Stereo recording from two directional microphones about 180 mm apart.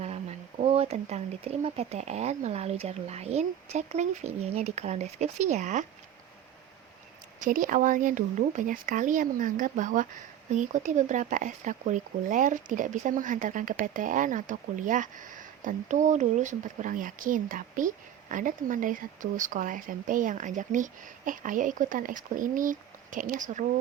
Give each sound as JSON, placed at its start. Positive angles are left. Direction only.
{"t": 0.0, "sound": "speech", "side_deg": -35}
{"t": 7.4, "sound": "speech", "side_deg": -50}